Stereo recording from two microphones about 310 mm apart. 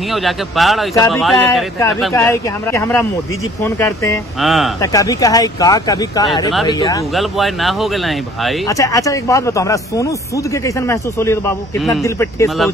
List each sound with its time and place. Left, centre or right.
0.1 s speech: centre
4.7 s speech: centre
7.2 s speech: centre
8.6 s speech: centre